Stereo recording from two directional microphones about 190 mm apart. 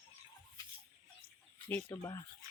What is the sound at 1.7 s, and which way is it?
Speech, 10° left (ahead or behind).